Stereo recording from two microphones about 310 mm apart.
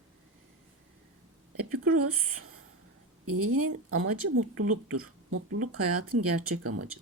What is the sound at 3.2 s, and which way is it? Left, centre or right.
A woman's voice, right.